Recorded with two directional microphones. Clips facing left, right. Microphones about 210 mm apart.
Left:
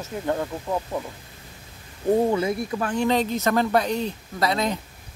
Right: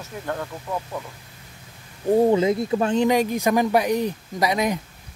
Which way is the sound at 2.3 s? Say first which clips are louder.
Right 5 dB; 20° right (ahead or behind).